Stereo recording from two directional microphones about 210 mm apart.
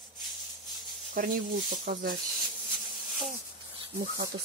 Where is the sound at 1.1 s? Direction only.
40° right (ahead or behind).